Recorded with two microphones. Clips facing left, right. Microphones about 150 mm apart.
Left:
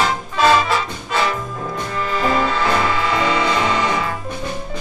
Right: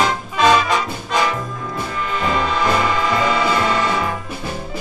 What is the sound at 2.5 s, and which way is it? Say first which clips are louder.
Music: right 1 dB; 15° right (ahead or behind).